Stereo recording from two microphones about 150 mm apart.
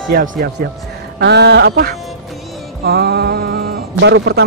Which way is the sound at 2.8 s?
90° right.